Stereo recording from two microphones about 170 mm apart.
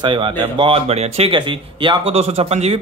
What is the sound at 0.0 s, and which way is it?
Speech, 30° right (ahead or behind).